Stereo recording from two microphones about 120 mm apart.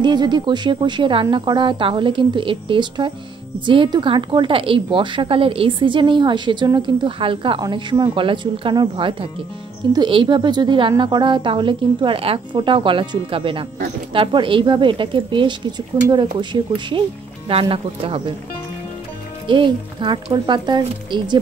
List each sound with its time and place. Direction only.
0.0 s a woman's voice: 40° right (ahead or behind)
17.5 s a woman's voice: 50° right (ahead or behind)
19.4 s speech: 45° right (ahead or behind)